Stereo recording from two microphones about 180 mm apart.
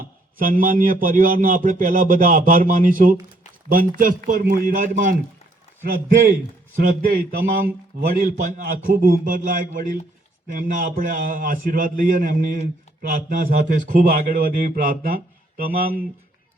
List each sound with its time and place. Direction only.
0.0 s a man's voice: 50° right (ahead or behind)
6.7 s a man's voice: 50° right (ahead or behind)
8.4 s a man's voice: 50° right (ahead or behind)